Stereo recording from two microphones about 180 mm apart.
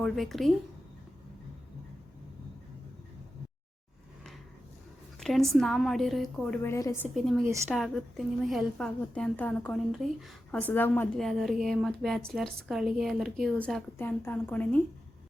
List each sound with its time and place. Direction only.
0.0 s a woman's voice: centre (ahead or behind)
5.2 s a woman's voice: centre (ahead or behind)
6.6 s a woman's voice: 15° left (ahead or behind)
7.0 s a woman's voice: centre (ahead or behind)
11.2 s a woman's voice: centre (ahead or behind)